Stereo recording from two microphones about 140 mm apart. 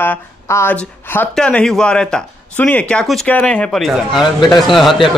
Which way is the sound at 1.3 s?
5° left (ahead or behind).